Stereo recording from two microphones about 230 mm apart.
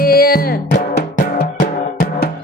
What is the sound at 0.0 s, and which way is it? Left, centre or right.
Music, left.